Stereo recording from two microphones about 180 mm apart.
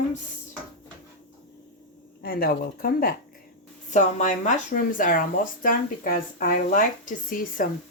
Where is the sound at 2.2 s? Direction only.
60° left (ahead or behind).